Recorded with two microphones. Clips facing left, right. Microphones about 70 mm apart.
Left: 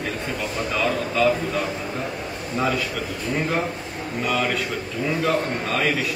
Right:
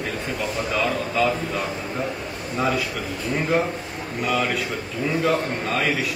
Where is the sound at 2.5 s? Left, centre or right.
Centre.